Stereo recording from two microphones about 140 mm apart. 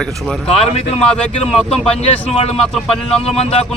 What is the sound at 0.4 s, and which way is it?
Speech, 45° left (ahead or behind).